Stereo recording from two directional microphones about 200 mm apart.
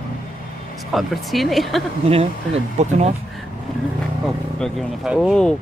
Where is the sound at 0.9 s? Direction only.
Centre (ahead or behind).